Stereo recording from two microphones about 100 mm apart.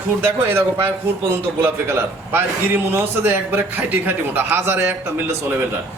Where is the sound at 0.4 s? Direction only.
25° right (ahead or behind).